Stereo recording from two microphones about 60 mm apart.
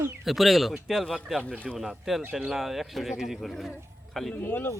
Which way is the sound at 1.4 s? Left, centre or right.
Left.